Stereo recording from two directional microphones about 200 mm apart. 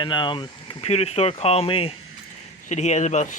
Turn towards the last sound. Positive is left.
turn(degrees=35)  # may be behind; listen again after turning